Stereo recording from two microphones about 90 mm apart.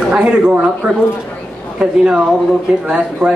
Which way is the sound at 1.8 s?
10° right (ahead or behind).